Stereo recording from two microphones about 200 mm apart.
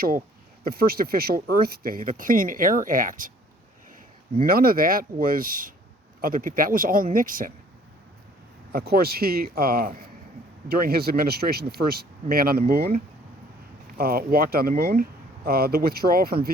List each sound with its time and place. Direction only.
0.6 s speech: 50° right (ahead or behind)
4.4 s speech: 45° right (ahead or behind)
8.7 s speech: 50° right (ahead or behind)
14.0 s speech: 50° right (ahead or behind)